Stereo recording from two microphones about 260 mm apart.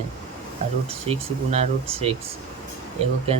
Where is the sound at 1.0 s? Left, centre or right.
Right.